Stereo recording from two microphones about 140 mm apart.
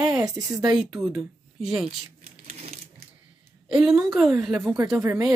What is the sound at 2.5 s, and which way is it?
Sewing machine, 50° right (ahead or behind).